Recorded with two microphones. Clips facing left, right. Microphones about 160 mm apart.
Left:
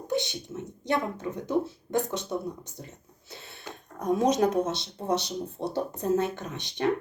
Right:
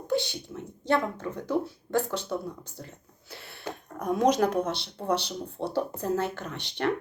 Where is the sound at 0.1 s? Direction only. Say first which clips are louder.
Right 1 dB; 20° left (ahead or behind).